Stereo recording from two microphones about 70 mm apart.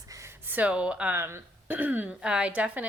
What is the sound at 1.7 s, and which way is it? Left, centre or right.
Speech, right.